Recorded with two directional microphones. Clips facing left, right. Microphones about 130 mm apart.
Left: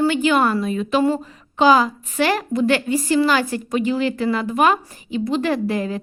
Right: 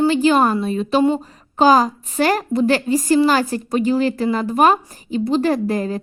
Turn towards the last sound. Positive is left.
turn(degrees=-40)  # may be behind; listen again after turning